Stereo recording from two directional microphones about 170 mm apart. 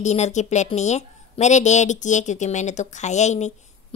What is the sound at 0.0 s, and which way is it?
A woman's voice, 40° left (ahead or behind).